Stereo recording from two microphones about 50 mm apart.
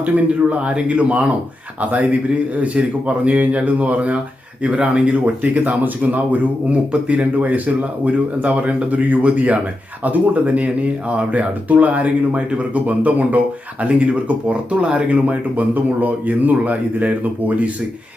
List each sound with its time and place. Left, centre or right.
0.5 s speech: right